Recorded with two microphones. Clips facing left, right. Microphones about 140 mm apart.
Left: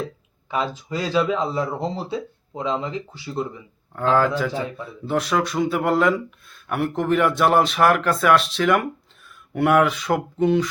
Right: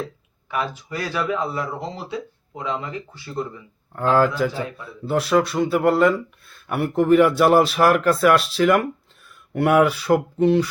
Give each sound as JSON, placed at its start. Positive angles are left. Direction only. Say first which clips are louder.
{"t": 0.5, "sound": "speech", "louder": "left 1 dB", "side_deg": 20}
{"t": 3.9, "sound": "speech", "louder": "right 1 dB", "side_deg": -5}